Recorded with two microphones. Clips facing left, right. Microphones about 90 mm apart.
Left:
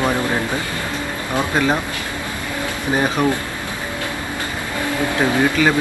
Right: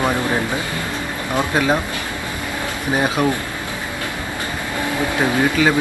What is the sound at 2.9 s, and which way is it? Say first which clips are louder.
Speech: even; 5° right (ahead or behind).